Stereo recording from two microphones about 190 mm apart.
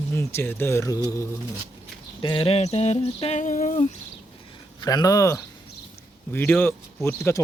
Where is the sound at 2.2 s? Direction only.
25° left (ahead or behind); by 3.9 s 40° left (ahead or behind).